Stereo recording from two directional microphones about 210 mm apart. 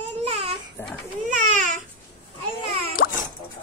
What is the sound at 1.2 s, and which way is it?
Babbling, 35° right (ahead or behind).